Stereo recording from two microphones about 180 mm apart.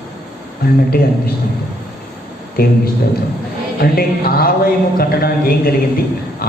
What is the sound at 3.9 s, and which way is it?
A man's voice, 55° left (ahead or behind).